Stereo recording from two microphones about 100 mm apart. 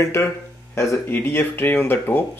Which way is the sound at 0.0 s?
25° left (ahead or behind).